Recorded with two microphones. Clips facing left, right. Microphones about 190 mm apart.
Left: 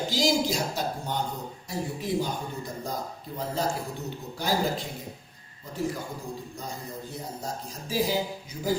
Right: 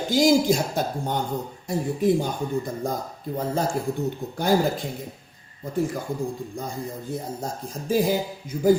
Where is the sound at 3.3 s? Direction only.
50° right (ahead or behind).